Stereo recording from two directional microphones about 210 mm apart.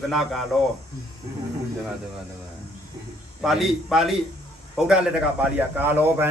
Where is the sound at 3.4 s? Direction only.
Centre (ahead or behind).